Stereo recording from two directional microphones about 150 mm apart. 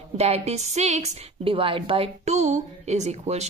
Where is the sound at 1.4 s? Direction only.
35° right (ahead or behind).